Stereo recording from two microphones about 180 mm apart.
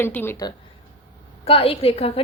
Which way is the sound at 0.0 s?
10° left (ahead or behind).